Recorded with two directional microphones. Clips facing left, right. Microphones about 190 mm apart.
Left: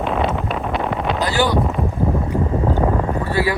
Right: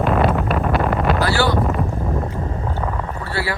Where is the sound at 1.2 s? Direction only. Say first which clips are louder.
Left 3 dB; 15° left (ahead or behind).